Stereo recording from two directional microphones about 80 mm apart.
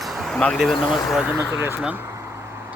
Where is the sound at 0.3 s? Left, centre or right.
Centre.